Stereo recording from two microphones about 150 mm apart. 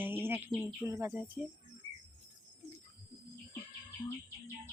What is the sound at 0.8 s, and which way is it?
Insect, 20° right (ahead or behind).